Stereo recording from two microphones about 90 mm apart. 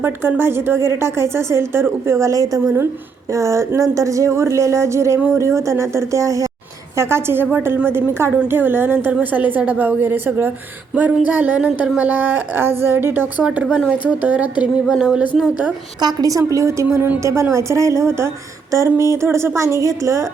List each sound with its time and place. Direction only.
0.0 s a woman's voice: 25° right (ahead or behind); by 15.3 s 10° right (ahead or behind)
16.0 s a woman's voice: 45° right (ahead or behind)
16.5 s speech: 35° right (ahead or behind)